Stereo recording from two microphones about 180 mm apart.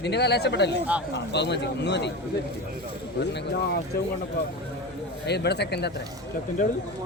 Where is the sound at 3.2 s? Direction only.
70° left (ahead or behind).